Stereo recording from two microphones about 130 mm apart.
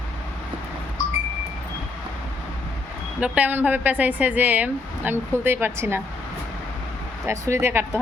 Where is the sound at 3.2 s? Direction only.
10° right (ahead or behind).